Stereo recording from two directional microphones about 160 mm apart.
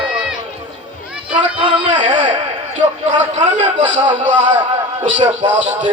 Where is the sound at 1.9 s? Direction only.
45° right (ahead or behind).